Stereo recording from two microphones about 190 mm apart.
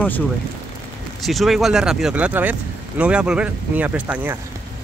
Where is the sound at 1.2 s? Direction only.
Centre (ahead or behind).